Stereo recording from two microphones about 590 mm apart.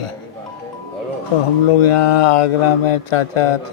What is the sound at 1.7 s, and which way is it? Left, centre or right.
Speech, left.